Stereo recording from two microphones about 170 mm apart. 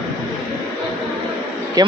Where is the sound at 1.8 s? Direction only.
20° right (ahead or behind).